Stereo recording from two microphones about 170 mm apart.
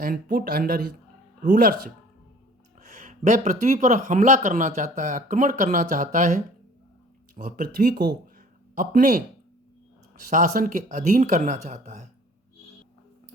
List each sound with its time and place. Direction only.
0.0 s speech: 55° right (ahead or behind)
2.8 s speech: 45° right (ahead or behind)
10.2 s speech: 55° right (ahead or behind)